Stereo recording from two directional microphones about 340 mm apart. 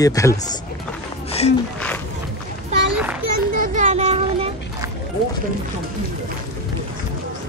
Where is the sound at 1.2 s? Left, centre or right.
Centre.